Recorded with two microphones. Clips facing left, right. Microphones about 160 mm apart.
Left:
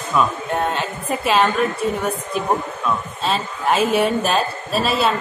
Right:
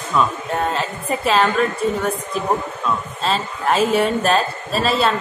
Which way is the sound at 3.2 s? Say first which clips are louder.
Right 1 dB; centre (ahead or behind).